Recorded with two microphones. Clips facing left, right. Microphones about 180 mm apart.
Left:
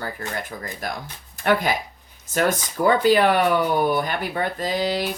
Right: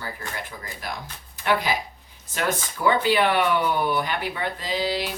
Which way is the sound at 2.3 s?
45° left (ahead or behind).